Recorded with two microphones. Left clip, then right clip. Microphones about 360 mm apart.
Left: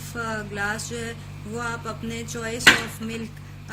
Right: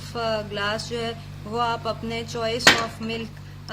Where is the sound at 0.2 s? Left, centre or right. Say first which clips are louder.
Right 3 dB; centre.